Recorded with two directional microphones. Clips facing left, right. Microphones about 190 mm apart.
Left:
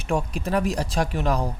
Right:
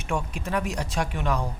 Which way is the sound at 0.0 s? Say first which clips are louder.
Left 4 dB; 35° left (ahead or behind).